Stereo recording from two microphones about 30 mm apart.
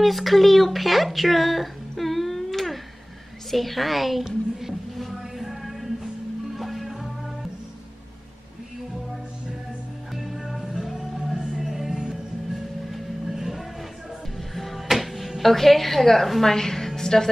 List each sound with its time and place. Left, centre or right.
0.0 s a woman's voice: centre
4.9 s a sound: centre
6.5 s music: centre
10.1 s music: centre
13.3 s music: centre
14.5 s music: centre
15.5 s a woman's voice: centre